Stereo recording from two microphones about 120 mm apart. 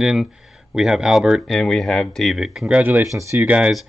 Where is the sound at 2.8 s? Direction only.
15° right (ahead or behind).